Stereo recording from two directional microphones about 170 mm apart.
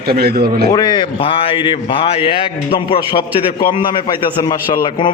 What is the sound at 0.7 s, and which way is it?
A man's voice, 25° left (ahead or behind).